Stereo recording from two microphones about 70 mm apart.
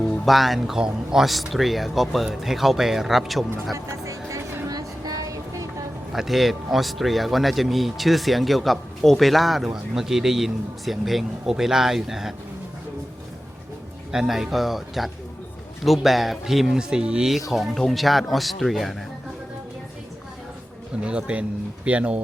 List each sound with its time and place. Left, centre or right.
0.3 s speech: centre
4.0 s music: right
4.7 s music: right
6.1 s speech: centre
14.1 s speech: centre
17.5 s speech: centre
21.0 s speech: centre